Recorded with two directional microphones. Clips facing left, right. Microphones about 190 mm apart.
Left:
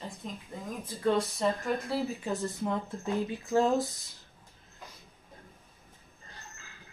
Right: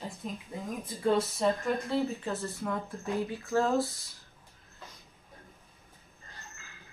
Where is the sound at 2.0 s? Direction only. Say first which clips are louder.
Left 1 dB; 15° left (ahead or behind).